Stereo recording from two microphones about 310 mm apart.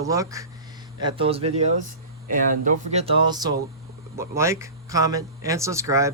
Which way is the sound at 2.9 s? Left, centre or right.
Centre.